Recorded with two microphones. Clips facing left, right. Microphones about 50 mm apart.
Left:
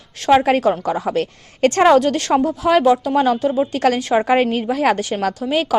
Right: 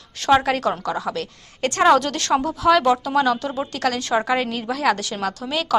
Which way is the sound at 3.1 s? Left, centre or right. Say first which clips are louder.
Left 4 dB; left.